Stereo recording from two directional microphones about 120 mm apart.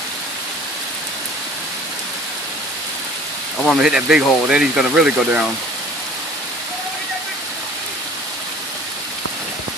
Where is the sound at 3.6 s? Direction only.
5° right (ahead or behind).